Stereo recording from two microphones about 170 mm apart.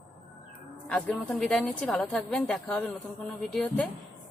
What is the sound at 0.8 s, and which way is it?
A woman's voice, 5° left (ahead or behind).